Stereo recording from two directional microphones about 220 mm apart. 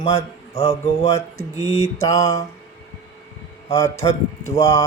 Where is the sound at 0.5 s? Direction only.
30° left (ahead or behind).